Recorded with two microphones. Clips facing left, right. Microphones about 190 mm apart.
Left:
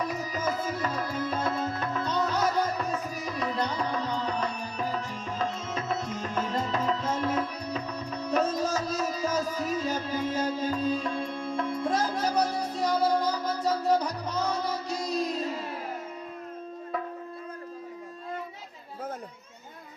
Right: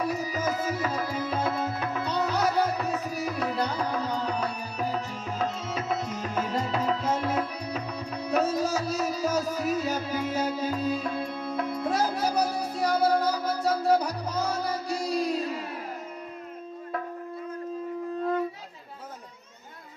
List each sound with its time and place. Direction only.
0.0 s tabla: 10° right (ahead or behind)